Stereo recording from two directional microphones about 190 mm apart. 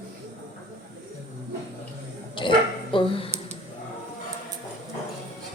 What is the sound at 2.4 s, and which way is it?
Dog, 25° left (ahead or behind).